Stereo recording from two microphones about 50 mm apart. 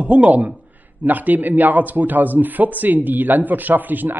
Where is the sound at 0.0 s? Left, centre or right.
Right.